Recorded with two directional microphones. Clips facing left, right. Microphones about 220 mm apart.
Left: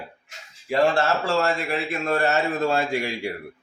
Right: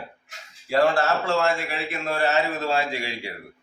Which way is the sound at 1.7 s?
45° left (ahead or behind).